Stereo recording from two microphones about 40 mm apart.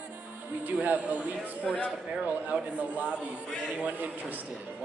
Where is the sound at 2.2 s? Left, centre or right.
Right.